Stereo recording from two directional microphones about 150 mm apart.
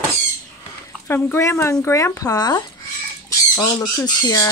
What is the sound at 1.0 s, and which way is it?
Speech, 15° left (ahead or behind).